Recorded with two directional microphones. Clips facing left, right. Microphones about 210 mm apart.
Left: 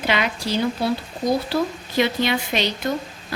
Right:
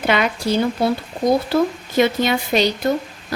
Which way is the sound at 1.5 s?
50° right (ahead or behind).